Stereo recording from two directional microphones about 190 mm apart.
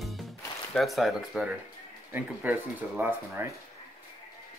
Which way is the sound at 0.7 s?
Centre (ahead or behind).